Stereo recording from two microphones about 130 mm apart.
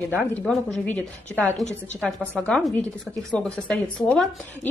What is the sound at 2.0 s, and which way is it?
Speech, centre (ahead or behind).